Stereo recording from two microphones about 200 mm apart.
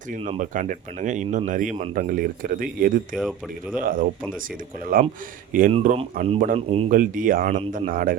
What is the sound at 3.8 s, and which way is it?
Speech, 45° right (ahead or behind).